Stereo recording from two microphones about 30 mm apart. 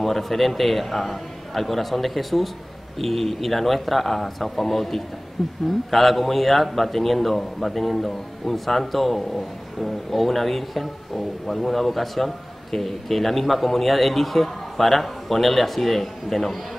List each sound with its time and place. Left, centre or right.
0.0 s a man's voice: centre